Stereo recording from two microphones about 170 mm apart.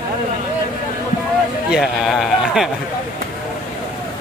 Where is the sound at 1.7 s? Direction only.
Centre (ahead or behind).